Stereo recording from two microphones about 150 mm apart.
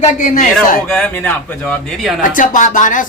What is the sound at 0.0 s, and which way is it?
Speech, 65° left (ahead or behind).